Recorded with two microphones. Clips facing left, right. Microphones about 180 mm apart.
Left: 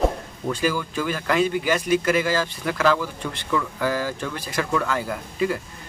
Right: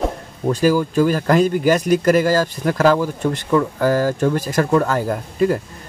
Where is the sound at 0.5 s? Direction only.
40° right (ahead or behind).